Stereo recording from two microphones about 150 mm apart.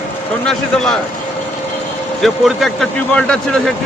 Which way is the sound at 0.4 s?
5° left (ahead or behind).